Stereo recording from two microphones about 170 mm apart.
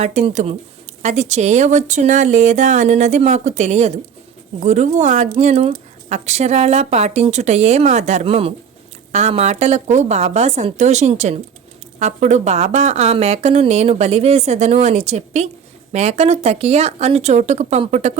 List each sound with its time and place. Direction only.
0.0 s speech: 40° right (ahead or behind)